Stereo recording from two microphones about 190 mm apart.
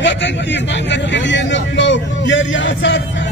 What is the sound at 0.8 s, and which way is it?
Speech, 70° left (ahead or behind).